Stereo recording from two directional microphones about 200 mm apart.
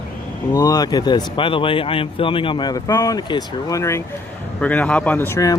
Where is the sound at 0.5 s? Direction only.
20° left (ahead or behind).